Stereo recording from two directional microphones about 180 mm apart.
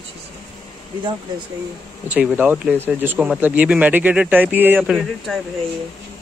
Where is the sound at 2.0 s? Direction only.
5° right (ahead or behind).